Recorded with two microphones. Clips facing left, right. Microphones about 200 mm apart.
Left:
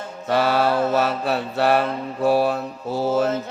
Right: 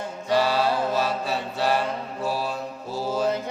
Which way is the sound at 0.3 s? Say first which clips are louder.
Left 3 dB; 60° left (ahead or behind).